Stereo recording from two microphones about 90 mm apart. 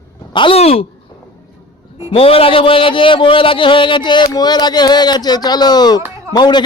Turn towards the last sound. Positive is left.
turn(degrees=55)  # may be behind; listen again after turning